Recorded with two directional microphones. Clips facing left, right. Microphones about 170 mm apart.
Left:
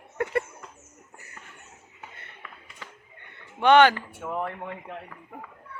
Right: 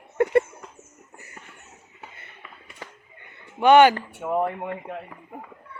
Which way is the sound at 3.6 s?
10° right (ahead or behind).